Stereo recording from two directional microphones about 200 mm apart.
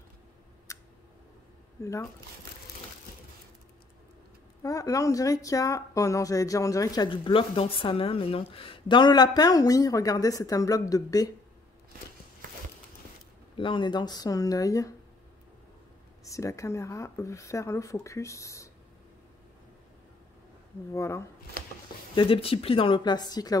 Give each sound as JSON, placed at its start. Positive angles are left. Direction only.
{"t": 0.7, "sound": "a sound", "side_deg": 15}
{"t": 1.8, "sound": "speech", "side_deg": 15}
{"t": 4.6, "sound": "speech", "side_deg": 15}
{"t": 13.6, "sound": "speech", "side_deg": 25}
{"t": 16.3, "sound": "speech", "side_deg": 15}
{"t": 20.9, "sound": "speech", "side_deg": 15}
{"t": 22.1, "sound": "speech", "side_deg": 25}